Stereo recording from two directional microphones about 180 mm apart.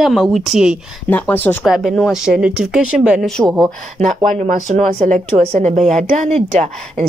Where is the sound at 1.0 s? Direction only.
10° left (ahead or behind).